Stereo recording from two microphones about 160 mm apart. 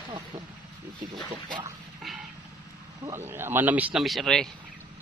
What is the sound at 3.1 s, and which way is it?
Speech, 15° right (ahead or behind).